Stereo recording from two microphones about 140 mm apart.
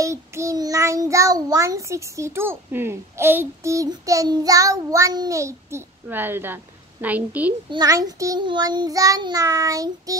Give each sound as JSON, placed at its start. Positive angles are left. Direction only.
{"t": 0.0, "sound": "child singing", "side_deg": -20}
{"t": 7.7, "sound": "child singing", "side_deg": -25}